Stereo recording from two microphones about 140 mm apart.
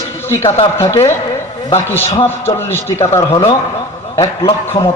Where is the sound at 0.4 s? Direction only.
45° left (ahead or behind).